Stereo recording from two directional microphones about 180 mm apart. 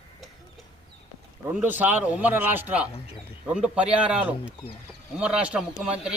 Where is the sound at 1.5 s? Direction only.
10° right (ahead or behind).